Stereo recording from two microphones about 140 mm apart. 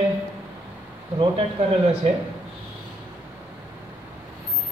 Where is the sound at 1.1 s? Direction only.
40° right (ahead or behind).